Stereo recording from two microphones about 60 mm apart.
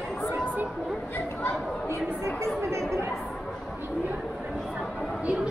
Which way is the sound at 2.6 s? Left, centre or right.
Right.